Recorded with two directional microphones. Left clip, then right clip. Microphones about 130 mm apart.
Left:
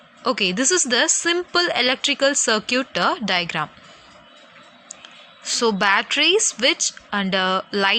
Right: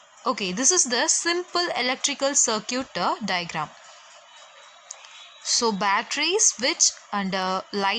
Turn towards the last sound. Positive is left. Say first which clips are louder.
# left 5 dB
turn(degrees=15)  # may be behind; listen again after turning